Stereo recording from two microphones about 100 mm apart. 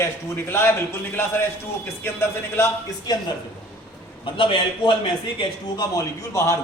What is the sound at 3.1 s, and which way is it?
Speech, 40° left (ahead or behind).